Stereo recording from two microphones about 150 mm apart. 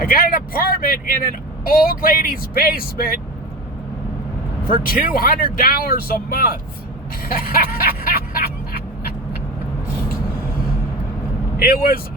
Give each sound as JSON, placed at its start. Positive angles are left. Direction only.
{"t": 0.0, "sound": "speech", "side_deg": 70}
{"t": 4.6, "sound": "speech", "side_deg": 75}
{"t": 7.3, "sound": "music", "side_deg": 80}
{"t": 11.6, "sound": "speech", "side_deg": 85}